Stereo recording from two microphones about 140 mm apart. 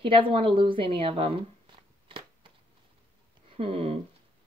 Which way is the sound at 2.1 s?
40° right (ahead or behind).